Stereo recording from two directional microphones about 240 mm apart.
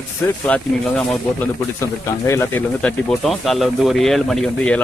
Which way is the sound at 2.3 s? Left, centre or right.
Centre.